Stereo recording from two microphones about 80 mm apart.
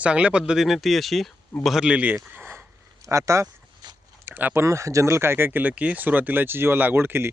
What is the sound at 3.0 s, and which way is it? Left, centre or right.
Speech, right.